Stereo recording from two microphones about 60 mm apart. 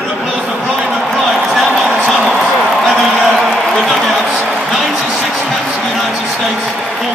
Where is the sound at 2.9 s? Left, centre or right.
Centre.